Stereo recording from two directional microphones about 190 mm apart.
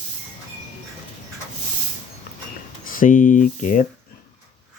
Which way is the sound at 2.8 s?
45° left (ahead or behind).